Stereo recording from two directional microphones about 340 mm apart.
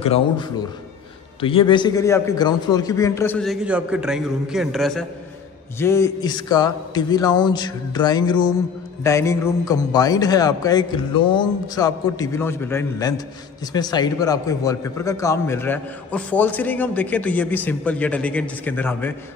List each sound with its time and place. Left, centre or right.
0.0 s a man's voice: centre